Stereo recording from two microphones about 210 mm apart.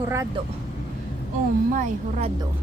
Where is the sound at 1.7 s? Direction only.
35° right (ahead or behind).